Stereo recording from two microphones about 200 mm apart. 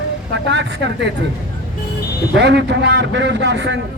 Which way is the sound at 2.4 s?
55° right (ahead or behind).